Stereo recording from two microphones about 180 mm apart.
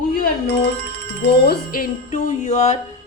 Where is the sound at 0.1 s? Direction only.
55° left (ahead or behind).